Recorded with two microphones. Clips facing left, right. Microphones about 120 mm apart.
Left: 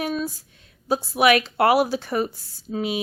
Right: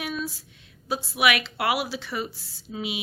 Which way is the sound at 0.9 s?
40° left (ahead or behind).